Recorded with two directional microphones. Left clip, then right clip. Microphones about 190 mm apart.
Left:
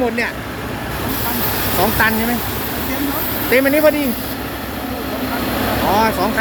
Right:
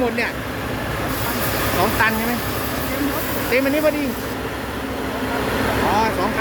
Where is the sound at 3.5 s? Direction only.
35° left (ahead or behind).